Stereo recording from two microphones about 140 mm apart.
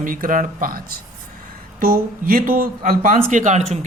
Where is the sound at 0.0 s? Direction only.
75° right (ahead or behind).